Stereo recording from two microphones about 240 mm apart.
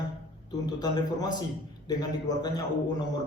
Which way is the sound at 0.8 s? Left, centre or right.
Centre.